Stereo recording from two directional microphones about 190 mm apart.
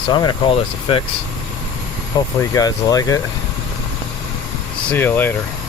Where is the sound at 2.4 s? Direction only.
15° left (ahead or behind).